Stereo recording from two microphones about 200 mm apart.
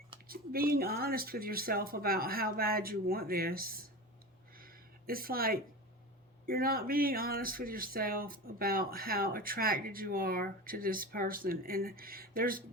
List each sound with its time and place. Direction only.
0.3 s speech: 45° right (ahead or behind)
4.5 s a sound: 45° right (ahead or behind)
6.4 s speech: 45° right (ahead or behind)